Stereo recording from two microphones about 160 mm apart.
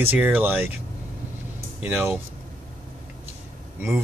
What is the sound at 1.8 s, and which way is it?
Speech, 10° right (ahead or behind).